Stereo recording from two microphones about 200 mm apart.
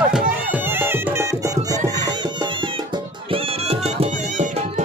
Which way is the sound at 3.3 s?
30° right (ahead or behind).